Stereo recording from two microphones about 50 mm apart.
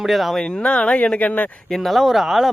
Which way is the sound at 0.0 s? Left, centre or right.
Centre.